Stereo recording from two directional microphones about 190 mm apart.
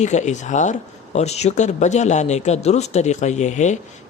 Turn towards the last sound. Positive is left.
turn(degrees=40)  # may be behind; listen again after turning